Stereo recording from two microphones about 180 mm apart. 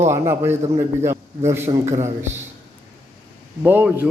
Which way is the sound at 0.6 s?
35° right (ahead or behind).